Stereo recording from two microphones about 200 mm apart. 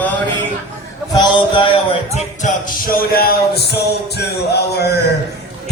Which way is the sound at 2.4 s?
45° left (ahead or behind).